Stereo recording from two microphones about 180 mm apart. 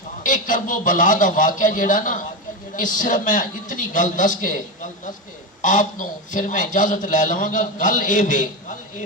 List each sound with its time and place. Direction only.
0.2 s a man's voice: 45° left (ahead or behind)